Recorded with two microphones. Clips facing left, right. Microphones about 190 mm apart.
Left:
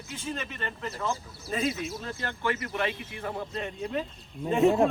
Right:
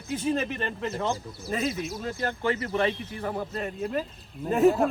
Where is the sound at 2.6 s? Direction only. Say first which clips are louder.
Right 5 dB; 30° right (ahead or behind).